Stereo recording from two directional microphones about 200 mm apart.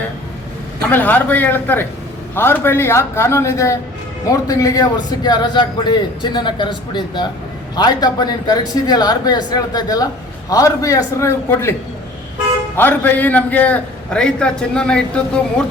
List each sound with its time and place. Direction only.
0.9 s a man's voice: 10° left (ahead or behind)
12.7 s a man's voice: 10° left (ahead or behind)